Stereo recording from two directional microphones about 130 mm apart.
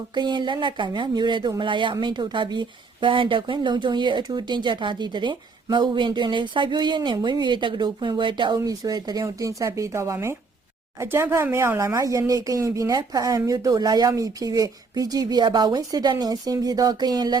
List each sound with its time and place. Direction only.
0.1 s speech: 35° right (ahead or behind)